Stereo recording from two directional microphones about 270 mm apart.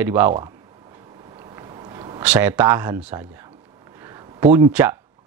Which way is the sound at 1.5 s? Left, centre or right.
Centre.